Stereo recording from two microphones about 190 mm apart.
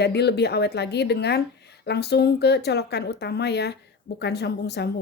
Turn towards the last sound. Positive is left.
turn(degrees=60)  # may be behind; listen again after turning